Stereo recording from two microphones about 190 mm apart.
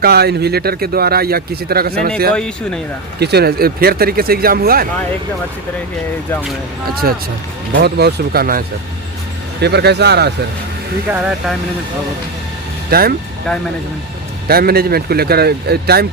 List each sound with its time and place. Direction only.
0.0 s speech: 55° right (ahead or behind)
2.3 s speech: 5° left (ahead or behind)
3.2 s speech: 60° right (ahead or behind)
7.7 s speech: 60° right (ahead or behind)
11.1 s speech: 5° right (ahead or behind)
12.9 s speech: 55° right (ahead or behind)
14.4 s speech: 55° right (ahead or behind)